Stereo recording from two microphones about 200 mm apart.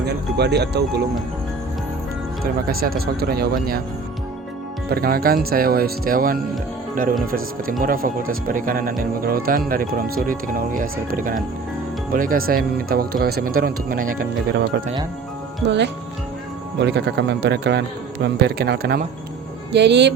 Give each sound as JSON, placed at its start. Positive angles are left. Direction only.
{"t": 0.0, "sound": "a man's voice", "side_deg": -55}
{"t": 2.4, "sound": "speech", "side_deg": -45}
{"t": 4.9, "sound": "speech", "side_deg": -50}
{"t": 15.6, "sound": "a man's voice", "side_deg": -60}